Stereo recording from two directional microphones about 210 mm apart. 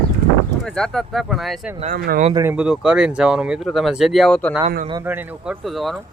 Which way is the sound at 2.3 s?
15° right (ahead or behind).